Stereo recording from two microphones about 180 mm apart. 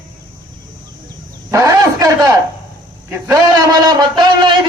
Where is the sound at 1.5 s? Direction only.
15° right (ahead or behind).